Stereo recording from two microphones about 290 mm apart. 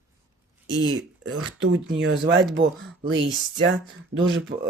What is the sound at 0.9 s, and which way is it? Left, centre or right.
Speech, right.